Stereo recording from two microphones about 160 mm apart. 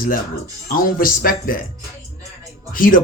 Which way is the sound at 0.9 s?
65° left (ahead or behind).